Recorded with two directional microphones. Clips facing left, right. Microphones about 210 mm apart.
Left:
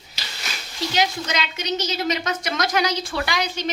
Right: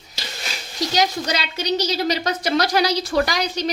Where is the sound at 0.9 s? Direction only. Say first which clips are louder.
Right 2 dB; 35° right (ahead or behind).